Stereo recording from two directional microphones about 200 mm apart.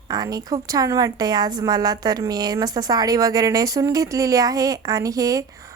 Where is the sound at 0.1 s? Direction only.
20° right (ahead or behind).